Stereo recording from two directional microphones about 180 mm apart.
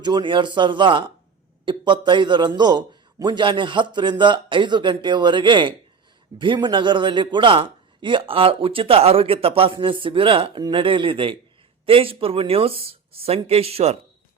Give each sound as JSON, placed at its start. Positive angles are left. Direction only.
{"t": 0.0, "sound": "a man's voice", "side_deg": -25}